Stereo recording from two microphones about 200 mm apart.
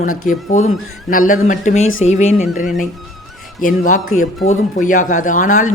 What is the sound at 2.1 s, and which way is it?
Speech, 35° left (ahead or behind).